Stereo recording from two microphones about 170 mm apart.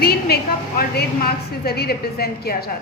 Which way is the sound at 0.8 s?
65° left (ahead or behind).